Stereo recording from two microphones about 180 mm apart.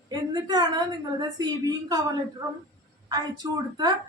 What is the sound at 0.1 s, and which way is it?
A woman's voice, 20° right (ahead or behind).